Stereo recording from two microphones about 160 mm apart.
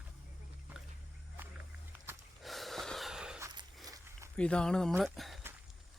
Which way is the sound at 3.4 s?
25° right (ahead or behind).